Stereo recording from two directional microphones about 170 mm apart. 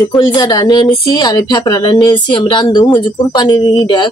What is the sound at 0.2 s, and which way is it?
Speech, 25° left (ahead or behind).